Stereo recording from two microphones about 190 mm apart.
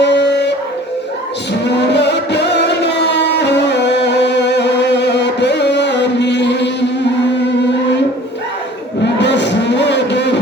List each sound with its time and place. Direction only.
0.0 s a sound: 65° left (ahead or behind)
1.6 s music: 65° left (ahead or behind)
9.1 s music: 65° left (ahead or behind)